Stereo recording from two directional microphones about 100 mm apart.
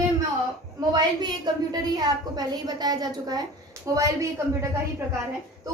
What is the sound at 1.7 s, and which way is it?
A woman's voice, 40° right (ahead or behind).